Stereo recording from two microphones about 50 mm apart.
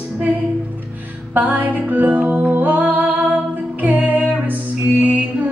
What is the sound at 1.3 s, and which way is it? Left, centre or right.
Music, right.